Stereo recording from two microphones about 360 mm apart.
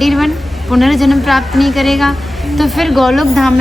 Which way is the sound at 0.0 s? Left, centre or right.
Centre.